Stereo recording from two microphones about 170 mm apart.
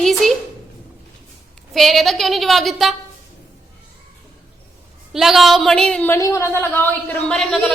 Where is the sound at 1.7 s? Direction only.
Centre (ahead or behind).